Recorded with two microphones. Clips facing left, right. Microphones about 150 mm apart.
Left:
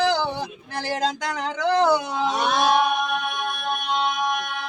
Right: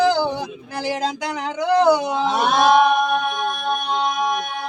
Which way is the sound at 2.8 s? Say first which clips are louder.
Right 6 dB; 50° right (ahead or behind).